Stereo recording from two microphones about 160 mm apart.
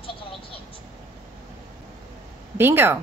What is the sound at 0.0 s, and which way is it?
Vehicle, 35° left (ahead or behind).